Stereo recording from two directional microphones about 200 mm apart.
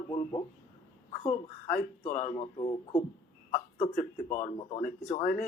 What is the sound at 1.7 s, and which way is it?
Speech, 35° left (ahead or behind).